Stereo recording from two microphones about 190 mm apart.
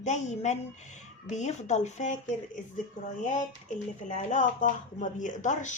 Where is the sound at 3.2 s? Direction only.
40° left (ahead or behind).